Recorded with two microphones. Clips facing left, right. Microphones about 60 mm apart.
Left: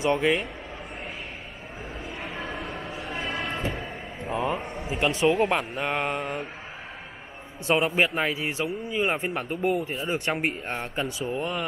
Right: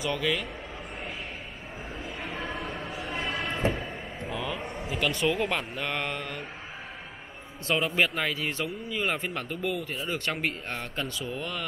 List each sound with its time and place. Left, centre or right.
0.0 s speech: left
2.0 s train: centre
4.3 s a sound: left
4.8 s a man's voice: left
7.6 s a man's voice: left